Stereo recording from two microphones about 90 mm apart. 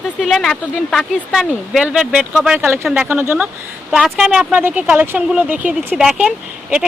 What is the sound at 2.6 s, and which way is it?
Speech, 25° right (ahead or behind).